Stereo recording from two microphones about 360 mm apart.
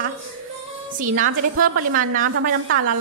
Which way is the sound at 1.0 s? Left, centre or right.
Right.